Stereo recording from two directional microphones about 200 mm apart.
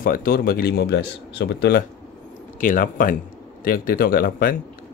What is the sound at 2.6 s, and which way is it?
Speech, 45° left (ahead or behind).